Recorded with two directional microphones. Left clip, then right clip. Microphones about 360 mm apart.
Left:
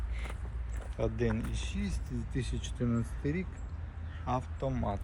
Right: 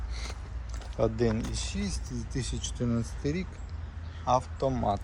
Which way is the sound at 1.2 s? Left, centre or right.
Centre.